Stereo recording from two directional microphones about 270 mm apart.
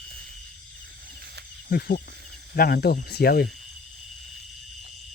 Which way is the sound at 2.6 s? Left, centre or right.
Left.